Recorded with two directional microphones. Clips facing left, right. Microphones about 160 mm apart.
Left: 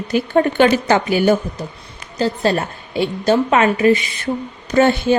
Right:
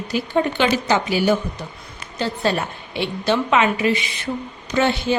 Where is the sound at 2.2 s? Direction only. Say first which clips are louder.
Left 4 dB; 40° left (ahead or behind).